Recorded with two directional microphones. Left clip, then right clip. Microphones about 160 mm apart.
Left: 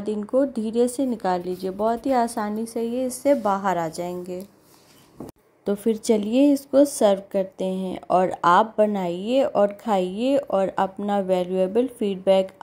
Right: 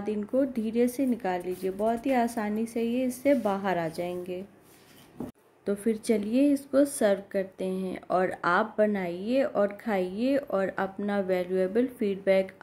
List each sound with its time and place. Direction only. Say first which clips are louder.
0.0 s speech: left 6 dB; 20° left (ahead or behind)
5.7 s speech: left 6 dB; 25° left (ahead or behind)